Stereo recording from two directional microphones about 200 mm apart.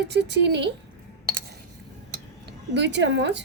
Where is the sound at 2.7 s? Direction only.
60° right (ahead or behind).